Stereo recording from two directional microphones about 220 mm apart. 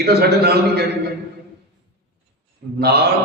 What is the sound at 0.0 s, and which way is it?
Mantra, 45° right (ahead or behind).